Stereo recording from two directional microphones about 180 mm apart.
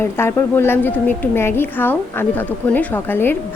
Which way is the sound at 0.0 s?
10° left (ahead or behind).